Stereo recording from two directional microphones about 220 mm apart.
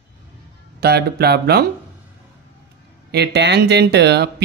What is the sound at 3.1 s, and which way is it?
Speech, 50° right (ahead or behind).